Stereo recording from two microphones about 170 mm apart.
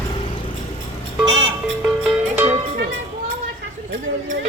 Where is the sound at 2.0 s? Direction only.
10° right (ahead or behind).